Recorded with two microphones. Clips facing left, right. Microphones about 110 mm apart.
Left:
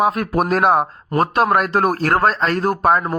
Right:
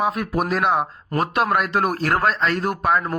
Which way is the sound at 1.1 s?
40° left (ahead or behind).